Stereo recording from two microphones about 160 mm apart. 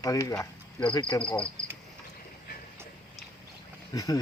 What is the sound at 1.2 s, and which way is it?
Speech, 5° left (ahead or behind).